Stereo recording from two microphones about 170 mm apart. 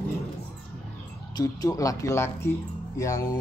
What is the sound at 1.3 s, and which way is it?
Speech, 20° left (ahead or behind).